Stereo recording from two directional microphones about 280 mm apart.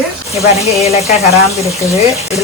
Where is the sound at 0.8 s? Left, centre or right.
Left.